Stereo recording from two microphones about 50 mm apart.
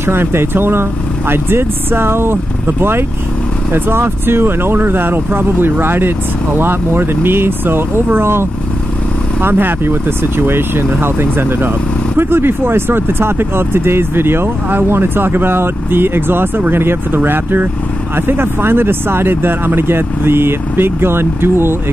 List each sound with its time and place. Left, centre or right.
0.0 s speech: right